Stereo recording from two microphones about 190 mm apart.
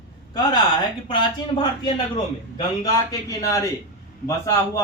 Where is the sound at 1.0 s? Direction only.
25° left (ahead or behind).